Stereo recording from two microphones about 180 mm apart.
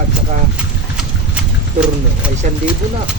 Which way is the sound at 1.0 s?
5° right (ahead or behind).